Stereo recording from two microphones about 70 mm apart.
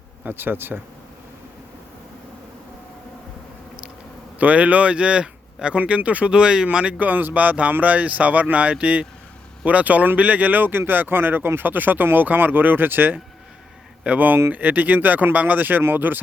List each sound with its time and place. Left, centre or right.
0.3 s speech: right
4.4 s speech: right
7.0 s speech: right